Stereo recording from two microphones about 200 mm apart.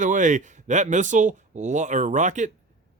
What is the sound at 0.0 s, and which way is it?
Speech, 40° right (ahead or behind).